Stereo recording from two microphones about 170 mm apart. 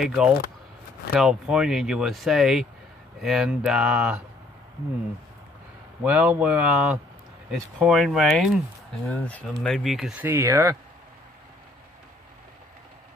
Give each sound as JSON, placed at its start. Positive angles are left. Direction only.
{"t": 0.0, "sound": "speech", "side_deg": 0}
{"t": 6.0, "sound": "speech", "side_deg": -10}
{"t": 10.2, "sound": "speech", "side_deg": -15}